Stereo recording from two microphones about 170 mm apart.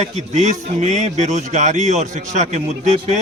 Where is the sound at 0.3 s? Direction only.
40° right (ahead or behind).